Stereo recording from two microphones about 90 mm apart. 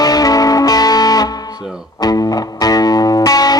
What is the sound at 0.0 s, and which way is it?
Music, 45° left (ahead or behind).